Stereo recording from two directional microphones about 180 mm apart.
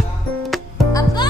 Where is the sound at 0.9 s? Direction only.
20° left (ahead or behind).